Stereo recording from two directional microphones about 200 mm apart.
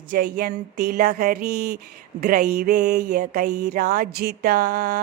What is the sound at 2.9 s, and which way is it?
Mantra, 55° right (ahead or behind).